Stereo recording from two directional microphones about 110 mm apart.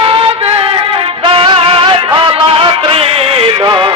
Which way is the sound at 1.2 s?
50° right (ahead or behind).